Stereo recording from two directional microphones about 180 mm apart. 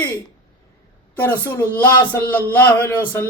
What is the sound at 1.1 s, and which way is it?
Speech, 10° left (ahead or behind).